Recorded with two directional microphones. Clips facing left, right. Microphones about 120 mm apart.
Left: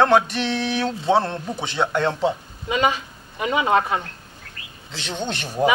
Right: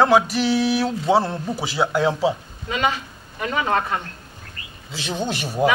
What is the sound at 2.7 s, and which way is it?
Speech, 15° left (ahead or behind).